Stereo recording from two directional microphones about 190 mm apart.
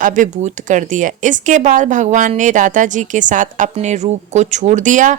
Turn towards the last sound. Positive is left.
turn(degrees=-40)  # may be behind; listen again after turning